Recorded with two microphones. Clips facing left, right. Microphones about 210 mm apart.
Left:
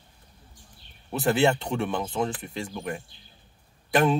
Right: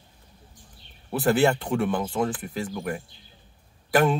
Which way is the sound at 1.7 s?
5° right (ahead or behind).